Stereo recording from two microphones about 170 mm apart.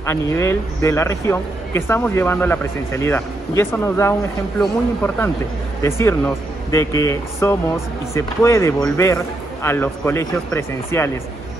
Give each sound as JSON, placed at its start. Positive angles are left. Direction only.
{"t": 0.0, "sound": "a man's voice", "side_deg": 15}